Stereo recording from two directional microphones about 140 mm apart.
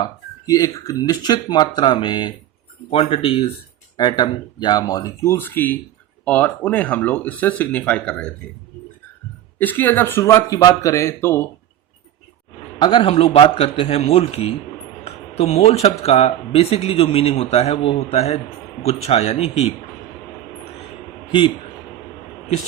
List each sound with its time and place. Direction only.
0.4 s speech: 25° left (ahead or behind); by 8.3 s 10° left (ahead or behind)
9.6 s speech: 15° left (ahead or behind)
12.8 s speech: 35° left (ahead or behind)